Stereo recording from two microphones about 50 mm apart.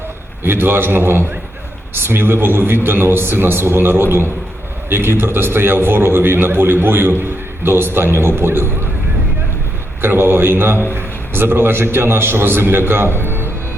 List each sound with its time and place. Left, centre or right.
0.4 s a man's voice: right
10.0 s a man's voice: right